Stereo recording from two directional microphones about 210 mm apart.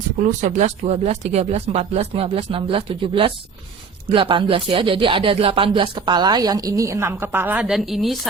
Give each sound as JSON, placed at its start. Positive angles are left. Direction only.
{"t": 0.2, "sound": "speech", "side_deg": -35}